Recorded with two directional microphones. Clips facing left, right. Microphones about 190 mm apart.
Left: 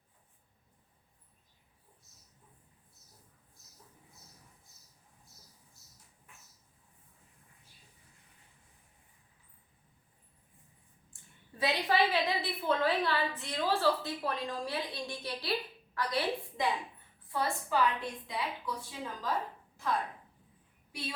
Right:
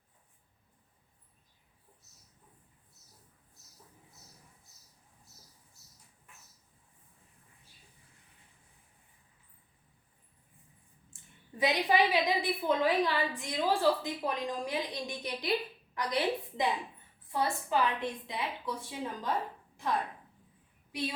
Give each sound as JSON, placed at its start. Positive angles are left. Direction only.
{"t": 11.1, "sound": "a woman's voice", "side_deg": -15}